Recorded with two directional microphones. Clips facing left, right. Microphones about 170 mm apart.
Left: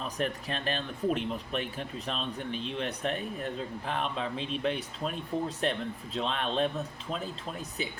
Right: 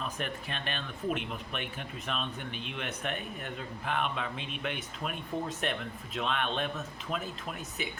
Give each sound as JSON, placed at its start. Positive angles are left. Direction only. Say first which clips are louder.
{"t": 0.0, "sound": "speech", "louder": "left 4 dB", "side_deg": 35}